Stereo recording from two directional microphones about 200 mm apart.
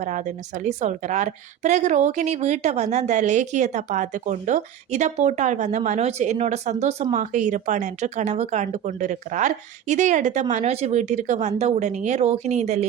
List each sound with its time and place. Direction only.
0.0 s a woman's voice: 35° right (ahead or behind)